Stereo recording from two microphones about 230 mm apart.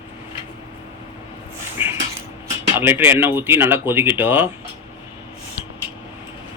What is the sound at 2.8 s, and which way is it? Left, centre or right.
Speech, centre.